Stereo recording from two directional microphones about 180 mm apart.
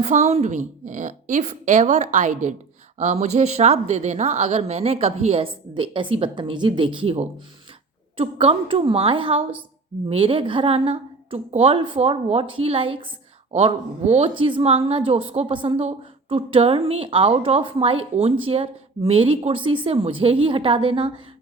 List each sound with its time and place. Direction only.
0.0 s a woman's voice: 40° right (ahead or behind)